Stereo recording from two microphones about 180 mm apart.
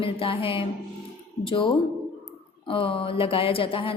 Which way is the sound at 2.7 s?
30° left (ahead or behind).